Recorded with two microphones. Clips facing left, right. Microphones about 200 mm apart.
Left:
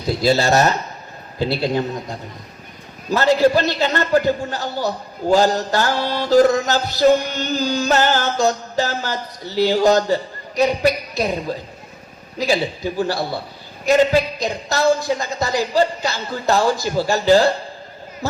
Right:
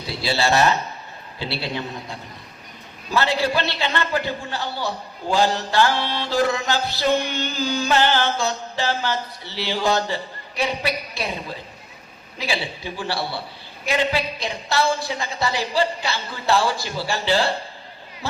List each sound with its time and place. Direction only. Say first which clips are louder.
0.0 s a man's voice: left 6 dB; 45° left (ahead or behind)